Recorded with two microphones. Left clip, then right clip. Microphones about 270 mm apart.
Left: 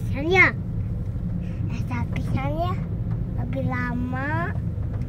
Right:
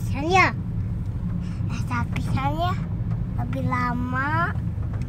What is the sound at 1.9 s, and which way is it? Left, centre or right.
Speech, centre.